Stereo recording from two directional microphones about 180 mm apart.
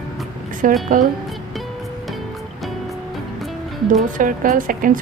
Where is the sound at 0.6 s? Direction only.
50° right (ahead or behind).